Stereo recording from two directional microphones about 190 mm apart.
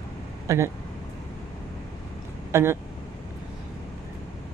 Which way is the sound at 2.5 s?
10° right (ahead or behind).